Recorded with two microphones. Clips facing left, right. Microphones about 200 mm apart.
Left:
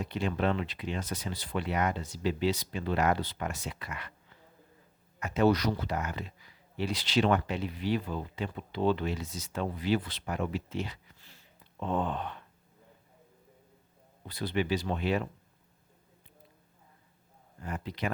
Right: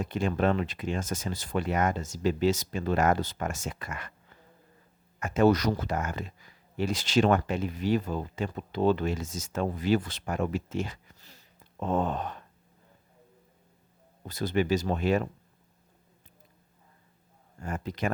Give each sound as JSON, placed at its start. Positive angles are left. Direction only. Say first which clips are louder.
{"t": 0.0, "sound": "speech", "louder": "right 3 dB", "side_deg": -45}
{"t": 14.3, "sound": "speech", "louder": "right 4 dB", "side_deg": -45}
{"t": 17.6, "sound": "speech", "louder": "right 3 dB", "side_deg": -45}